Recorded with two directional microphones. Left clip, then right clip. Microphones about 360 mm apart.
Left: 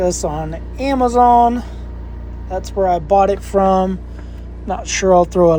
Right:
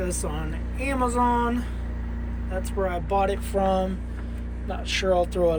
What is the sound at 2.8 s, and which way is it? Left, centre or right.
Speech, centre.